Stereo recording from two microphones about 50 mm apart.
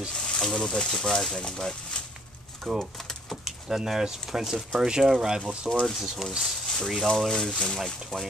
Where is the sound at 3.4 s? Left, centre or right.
Centre.